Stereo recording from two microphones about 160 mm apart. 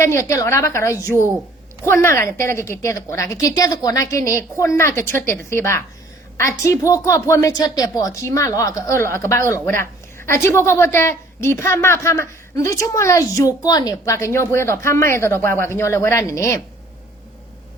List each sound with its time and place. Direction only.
0.0 s a woman's voice: 15° left (ahead or behind)